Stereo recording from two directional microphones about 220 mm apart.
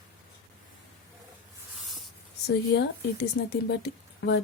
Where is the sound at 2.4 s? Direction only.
50° left (ahead or behind).